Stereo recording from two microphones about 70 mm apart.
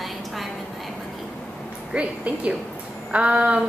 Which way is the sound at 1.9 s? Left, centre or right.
Centre.